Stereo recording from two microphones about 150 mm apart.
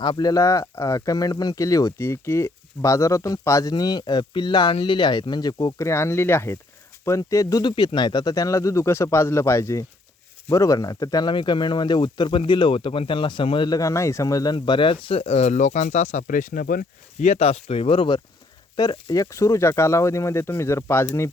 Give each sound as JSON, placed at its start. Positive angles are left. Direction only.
{"t": 0.0, "sound": "speech", "side_deg": 25}